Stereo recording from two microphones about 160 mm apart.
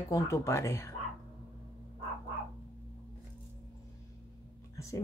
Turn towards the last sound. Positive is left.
turn(degrees=20)  # may be behind; listen again after turning